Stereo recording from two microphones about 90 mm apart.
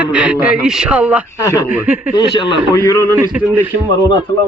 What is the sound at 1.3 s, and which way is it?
Speech, 40° left (ahead or behind).